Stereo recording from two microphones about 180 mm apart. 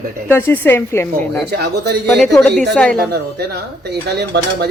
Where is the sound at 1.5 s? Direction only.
65° right (ahead or behind).